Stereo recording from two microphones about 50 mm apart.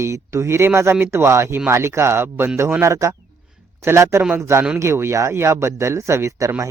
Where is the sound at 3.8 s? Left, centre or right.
Right.